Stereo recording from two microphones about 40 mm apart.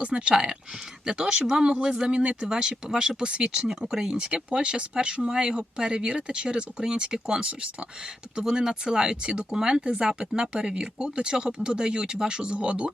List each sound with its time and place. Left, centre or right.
0.0 s speech: right
1.0 s speech: centre